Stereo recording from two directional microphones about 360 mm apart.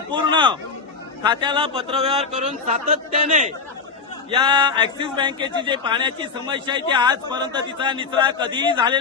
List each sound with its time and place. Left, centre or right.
0.1 s speech: centre